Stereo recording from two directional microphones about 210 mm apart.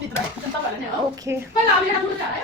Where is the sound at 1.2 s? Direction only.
15° right (ahead or behind).